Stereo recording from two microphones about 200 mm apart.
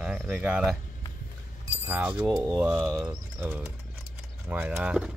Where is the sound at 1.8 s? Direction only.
10° right (ahead or behind).